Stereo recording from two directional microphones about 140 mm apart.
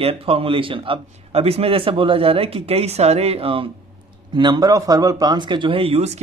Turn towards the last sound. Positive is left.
turn(degrees=-45)  # may be behind; listen again after turning